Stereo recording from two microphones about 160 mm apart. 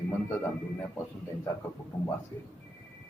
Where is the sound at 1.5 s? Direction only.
20° left (ahead or behind).